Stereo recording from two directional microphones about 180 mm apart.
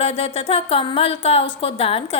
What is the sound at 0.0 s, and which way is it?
A woman's voice, 35° left (ahead or behind).